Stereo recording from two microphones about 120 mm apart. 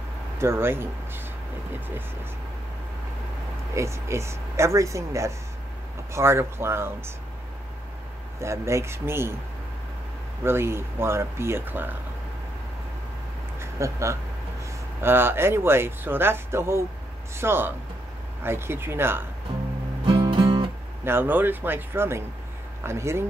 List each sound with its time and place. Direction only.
0.4 s speech: 20° right (ahead or behind)
3.7 s speech: 25° right (ahead or behind)
8.4 s speech: 25° right (ahead or behind)
10.4 s speech: 20° right (ahead or behind)
13.6 s a sound: 25° right (ahead or behind)
15.0 s speech: 20° right (ahead or behind)
20.1 s music: 45° right (ahead or behind)
21.0 s speech: 20° right (ahead or behind)